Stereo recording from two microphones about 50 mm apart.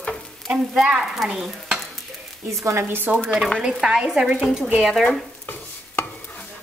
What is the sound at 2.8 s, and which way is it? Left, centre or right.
Speech, right.